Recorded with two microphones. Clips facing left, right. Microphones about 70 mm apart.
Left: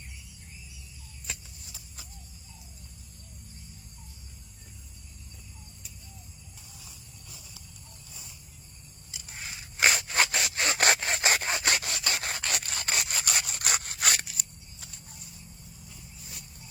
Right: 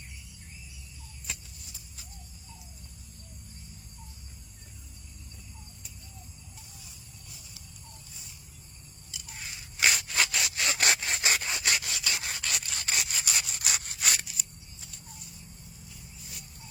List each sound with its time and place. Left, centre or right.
9.7 s sawing: left